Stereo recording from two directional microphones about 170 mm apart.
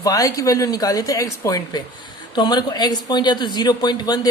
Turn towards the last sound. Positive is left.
turn(degrees=25)  # may be behind; listen again after turning